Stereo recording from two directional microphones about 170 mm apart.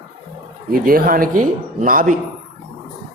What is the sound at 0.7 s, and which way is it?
Speech, 60° right (ahead or behind).